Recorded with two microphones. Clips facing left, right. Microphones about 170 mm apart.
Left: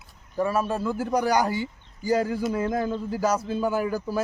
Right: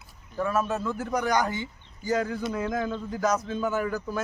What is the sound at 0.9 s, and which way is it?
Speech, 35° left (ahead or behind).